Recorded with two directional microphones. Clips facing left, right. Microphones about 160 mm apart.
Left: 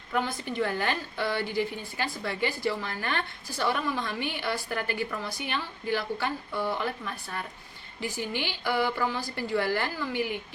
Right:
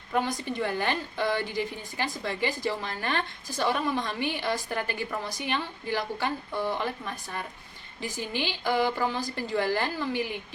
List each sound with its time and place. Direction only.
0.1 s a woman's voice: 15° right (ahead or behind)